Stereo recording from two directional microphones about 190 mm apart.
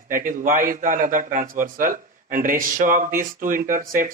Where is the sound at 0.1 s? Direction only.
45° right (ahead or behind).